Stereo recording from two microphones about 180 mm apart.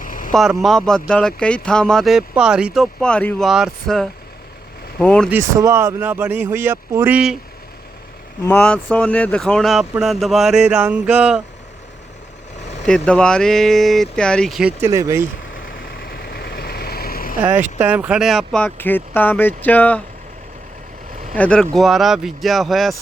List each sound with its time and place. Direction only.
0.0 s vehicle: 50° left (ahead or behind)
0.3 s speech: centre (ahead or behind)
5.3 s speech: 15° right (ahead or behind)
8.4 s speech: 10° left (ahead or behind)
12.8 s speech: 5° left (ahead or behind)
14.8 s speech: 15° right (ahead or behind)
16.0 s vehicle: 60° left (ahead or behind)
17.4 s speech: 10° right (ahead or behind); by 20.0 s 10° left (ahead or behind)
21.3 s speech: 5° left (ahead or behind)